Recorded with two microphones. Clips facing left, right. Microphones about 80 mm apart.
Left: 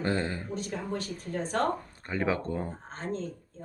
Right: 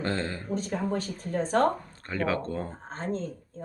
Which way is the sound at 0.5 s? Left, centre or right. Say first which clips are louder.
Right 4 dB; right.